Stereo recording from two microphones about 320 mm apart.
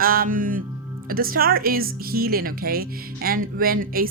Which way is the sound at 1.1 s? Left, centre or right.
Right.